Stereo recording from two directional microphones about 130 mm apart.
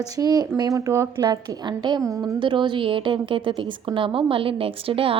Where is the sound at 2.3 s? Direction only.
35° right (ahead or behind).